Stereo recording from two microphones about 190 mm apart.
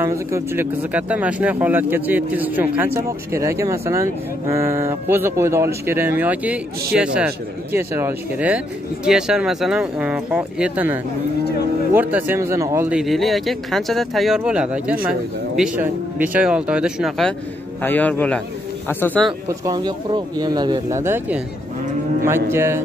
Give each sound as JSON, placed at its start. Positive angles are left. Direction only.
{"t": 0.0, "sound": "speech", "side_deg": -15}
{"t": 12.9, "sound": "speech", "side_deg": 0}
{"t": 17.8, "sound": "a man's voice", "side_deg": 10}
{"t": 19.6, "sound": "speech", "side_deg": -20}